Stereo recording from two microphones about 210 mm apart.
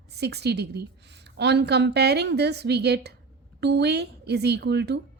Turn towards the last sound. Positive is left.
turn(degrees=-50)  # may be behind; listen again after turning